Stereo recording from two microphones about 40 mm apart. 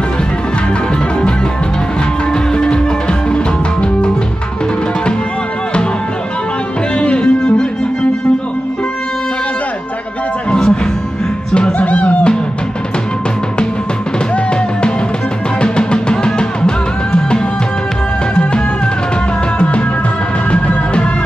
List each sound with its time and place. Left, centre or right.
2.5 s music: left
7.0 s music: left
10.5 s music: left
11.8 s music: left
15.6 s music: left
20.5 s music: left